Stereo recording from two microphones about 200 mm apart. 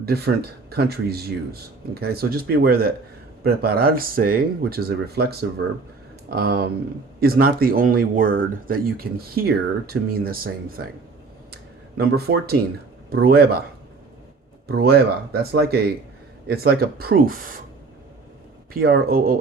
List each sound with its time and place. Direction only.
0.7 s speech: 50° right (ahead or behind)
11.9 s speech: 50° right (ahead or behind)
14.7 s speech: 50° right (ahead or behind)
18.7 s speech: 50° right (ahead or behind)